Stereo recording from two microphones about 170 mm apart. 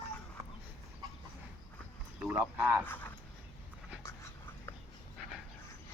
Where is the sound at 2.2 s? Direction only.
10° right (ahead or behind).